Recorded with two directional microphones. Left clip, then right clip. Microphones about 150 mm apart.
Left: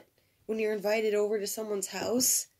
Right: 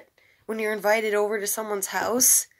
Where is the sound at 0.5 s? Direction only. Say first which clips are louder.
Right 6 dB; 20° left (ahead or behind).